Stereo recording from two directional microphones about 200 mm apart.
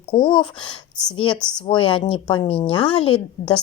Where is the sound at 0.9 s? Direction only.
5° left (ahead or behind).